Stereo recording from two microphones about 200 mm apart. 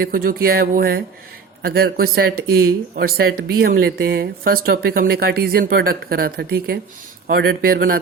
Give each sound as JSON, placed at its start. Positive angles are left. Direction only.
{"t": 0.0, "sound": "speech", "side_deg": -45}